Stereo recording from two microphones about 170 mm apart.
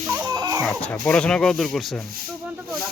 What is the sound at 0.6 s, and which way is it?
Speech, 5° left (ahead or behind).